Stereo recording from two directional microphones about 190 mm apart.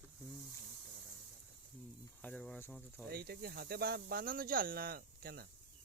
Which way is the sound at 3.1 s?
55° right (ahead or behind).